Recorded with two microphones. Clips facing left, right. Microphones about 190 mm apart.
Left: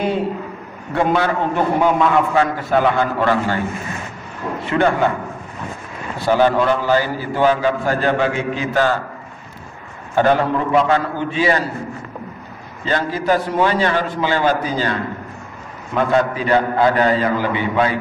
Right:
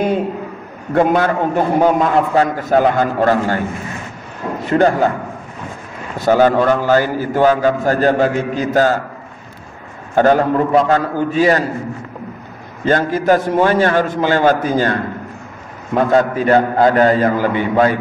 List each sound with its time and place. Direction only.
0.9 s a man's voice: 45° right (ahead or behind)
4.6 s a man's voice: 40° right (ahead or behind)
6.1 s a man's voice: 45° right (ahead or behind)
10.1 s a man's voice: 45° right (ahead or behind)
12.8 s a man's voice: 50° right (ahead or behind)